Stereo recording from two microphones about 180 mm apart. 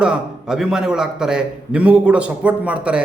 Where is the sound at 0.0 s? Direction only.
5° right (ahead or behind).